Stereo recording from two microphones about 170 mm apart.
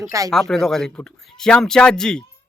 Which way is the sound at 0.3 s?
5° left (ahead or behind).